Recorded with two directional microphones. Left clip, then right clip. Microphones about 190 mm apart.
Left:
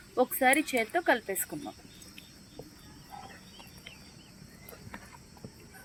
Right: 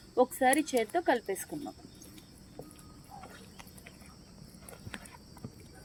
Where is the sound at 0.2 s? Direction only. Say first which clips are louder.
Left 1 dB; 20° right (ahead or behind).